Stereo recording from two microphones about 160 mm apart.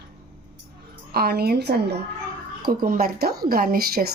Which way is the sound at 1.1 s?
75° right (ahead or behind).